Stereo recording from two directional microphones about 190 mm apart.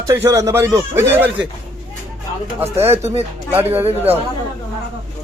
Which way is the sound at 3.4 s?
10° right (ahead or behind).